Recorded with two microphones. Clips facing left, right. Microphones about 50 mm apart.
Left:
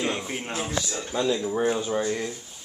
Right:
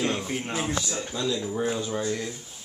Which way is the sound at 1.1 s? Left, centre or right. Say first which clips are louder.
Left 5 dB; left.